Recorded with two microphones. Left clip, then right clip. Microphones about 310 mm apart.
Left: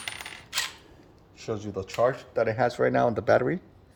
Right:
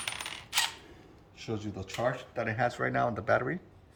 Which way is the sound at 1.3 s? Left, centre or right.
Centre.